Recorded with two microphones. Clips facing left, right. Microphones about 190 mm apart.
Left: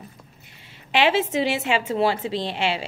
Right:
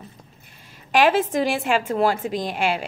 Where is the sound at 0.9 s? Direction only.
45° right (ahead or behind).